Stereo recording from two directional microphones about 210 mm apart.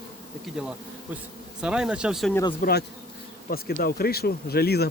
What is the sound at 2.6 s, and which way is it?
Speech, 45° left (ahead or behind).